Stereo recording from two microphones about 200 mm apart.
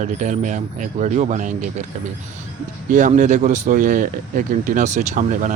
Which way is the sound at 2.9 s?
40° right (ahead or behind).